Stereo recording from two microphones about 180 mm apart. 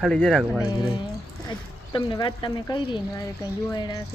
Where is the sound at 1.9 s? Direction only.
25° left (ahead or behind).